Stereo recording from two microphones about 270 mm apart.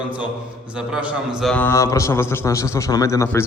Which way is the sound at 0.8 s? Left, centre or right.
Centre.